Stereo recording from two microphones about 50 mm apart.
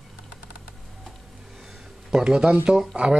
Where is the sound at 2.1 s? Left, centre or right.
Centre.